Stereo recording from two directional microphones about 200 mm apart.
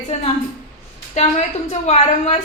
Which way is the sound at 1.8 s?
30° left (ahead or behind).